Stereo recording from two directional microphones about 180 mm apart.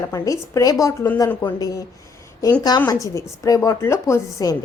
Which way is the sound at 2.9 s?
20° left (ahead or behind).